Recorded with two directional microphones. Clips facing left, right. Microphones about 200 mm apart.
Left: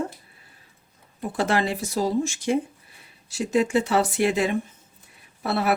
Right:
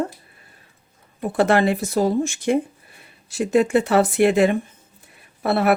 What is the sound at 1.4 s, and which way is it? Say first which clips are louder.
Speech: right 6 dB; 55° right (ahead or behind).